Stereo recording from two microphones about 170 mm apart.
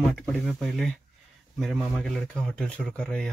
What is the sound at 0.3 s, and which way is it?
A man's voice, centre (ahead or behind).